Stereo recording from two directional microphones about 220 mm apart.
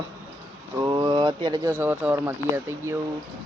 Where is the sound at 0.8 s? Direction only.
20° right (ahead or behind).